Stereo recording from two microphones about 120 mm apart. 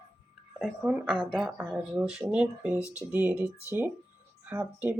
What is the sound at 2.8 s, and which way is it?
Speech, 25° left (ahead or behind).